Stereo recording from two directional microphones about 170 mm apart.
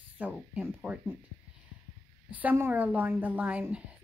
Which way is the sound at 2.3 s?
10° right (ahead or behind).